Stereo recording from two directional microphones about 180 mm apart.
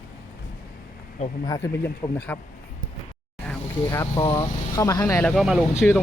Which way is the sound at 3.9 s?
20° left (ahead or behind).